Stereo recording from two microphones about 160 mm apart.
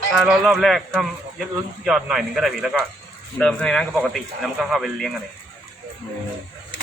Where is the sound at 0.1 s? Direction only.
Centre (ahead or behind).